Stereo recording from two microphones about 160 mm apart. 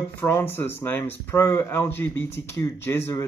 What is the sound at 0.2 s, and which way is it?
Speech, 15° left (ahead or behind).